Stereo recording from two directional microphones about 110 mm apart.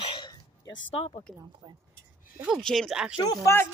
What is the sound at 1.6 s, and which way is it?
Speech, 45° right (ahead or behind).